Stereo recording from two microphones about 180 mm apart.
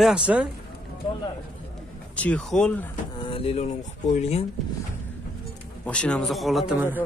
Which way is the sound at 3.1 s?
30° left (ahead or behind).